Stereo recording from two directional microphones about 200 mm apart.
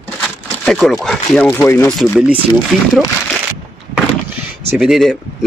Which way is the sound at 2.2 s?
5° right (ahead or behind).